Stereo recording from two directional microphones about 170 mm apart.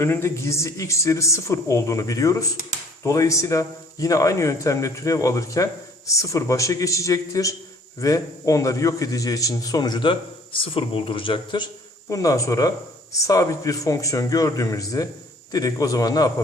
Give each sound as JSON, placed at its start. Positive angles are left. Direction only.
{"t": 0.0, "sound": "a man's voice", "side_deg": 15}